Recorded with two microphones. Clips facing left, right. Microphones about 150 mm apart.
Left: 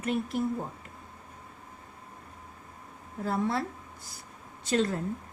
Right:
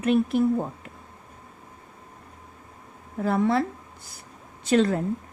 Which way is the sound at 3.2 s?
70° right (ahead or behind).